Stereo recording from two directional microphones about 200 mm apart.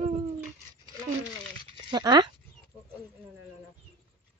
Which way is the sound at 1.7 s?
20° right (ahead or behind).